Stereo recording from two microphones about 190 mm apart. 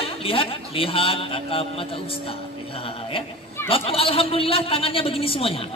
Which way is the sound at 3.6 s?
30° left (ahead or behind).